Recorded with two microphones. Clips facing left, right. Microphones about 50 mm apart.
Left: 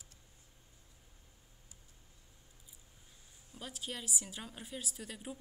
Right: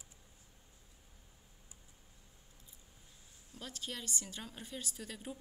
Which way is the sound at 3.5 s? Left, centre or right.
Centre.